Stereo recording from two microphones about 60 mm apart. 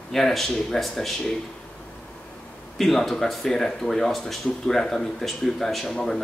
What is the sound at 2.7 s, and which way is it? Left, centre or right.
Speech, centre.